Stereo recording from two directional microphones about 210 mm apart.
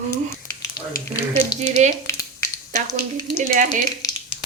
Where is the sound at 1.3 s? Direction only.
35° right (ahead or behind).